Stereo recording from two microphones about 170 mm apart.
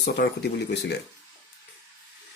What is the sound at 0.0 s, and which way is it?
Speech, 80° left.